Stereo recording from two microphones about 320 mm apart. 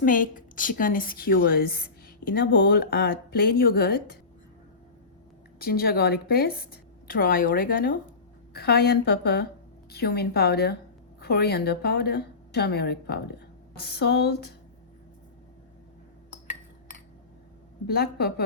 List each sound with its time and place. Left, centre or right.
0.0 s a woman's voice: left
5.5 s a woman's voice: left
17.8 s a woman's voice: left